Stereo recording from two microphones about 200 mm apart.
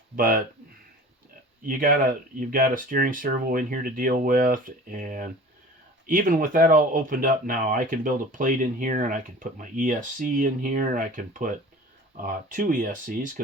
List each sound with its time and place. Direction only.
0.2 s speech: 45° right (ahead or behind)
1.6 s speech: 45° right (ahead or behind)